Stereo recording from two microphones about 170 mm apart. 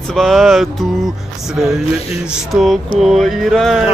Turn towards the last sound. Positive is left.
turn(degrees=0)  # may be behind; listen again after turning